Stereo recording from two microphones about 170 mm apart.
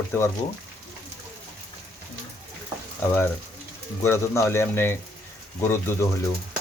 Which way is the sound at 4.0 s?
15° left (ahead or behind).